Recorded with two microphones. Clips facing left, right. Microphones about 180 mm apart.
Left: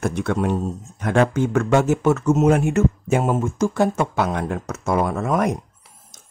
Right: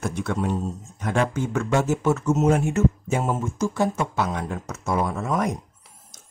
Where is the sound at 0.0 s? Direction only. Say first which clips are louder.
Left 4 dB; 60° left (ahead or behind).